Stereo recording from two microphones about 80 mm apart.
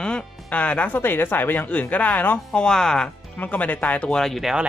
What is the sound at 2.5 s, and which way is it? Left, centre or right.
Speech, centre.